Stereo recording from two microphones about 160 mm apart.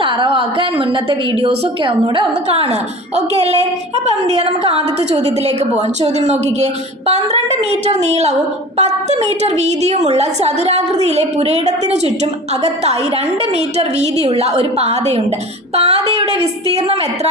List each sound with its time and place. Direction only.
0.0 s a woman's voice: 30° right (ahead or behind)